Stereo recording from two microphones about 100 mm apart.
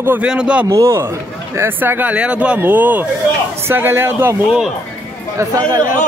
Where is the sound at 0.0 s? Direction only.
20° right (ahead or behind).